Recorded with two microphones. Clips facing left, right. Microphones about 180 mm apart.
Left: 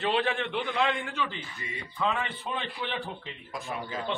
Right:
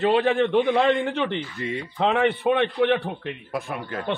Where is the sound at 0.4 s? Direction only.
55° right (ahead or behind).